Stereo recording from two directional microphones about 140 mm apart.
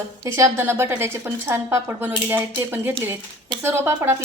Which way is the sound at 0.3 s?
20° right (ahead or behind).